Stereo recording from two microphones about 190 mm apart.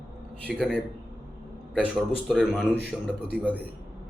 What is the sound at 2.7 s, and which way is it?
Speech, 65° right (ahead or behind).